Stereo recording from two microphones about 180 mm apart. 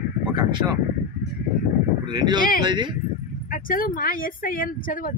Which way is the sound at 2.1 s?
25° right (ahead or behind).